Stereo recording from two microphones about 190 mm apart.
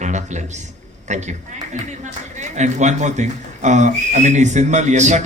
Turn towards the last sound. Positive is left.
turn(degrees=-40)  # may be behind; listen again after turning